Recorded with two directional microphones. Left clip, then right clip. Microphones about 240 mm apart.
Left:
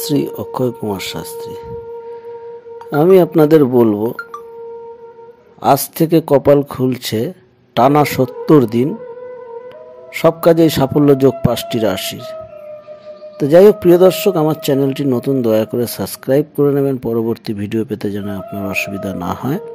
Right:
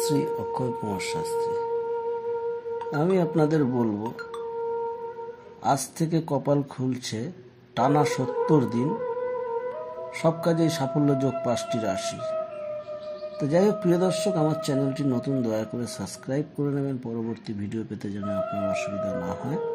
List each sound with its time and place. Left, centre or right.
0.0 s speech: left
2.9 s speech: left
5.6 s speech: left
10.1 s speech: left
13.4 s speech: left